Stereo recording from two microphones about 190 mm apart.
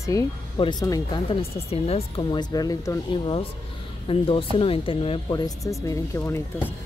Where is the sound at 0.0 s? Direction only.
15° left (ahead or behind).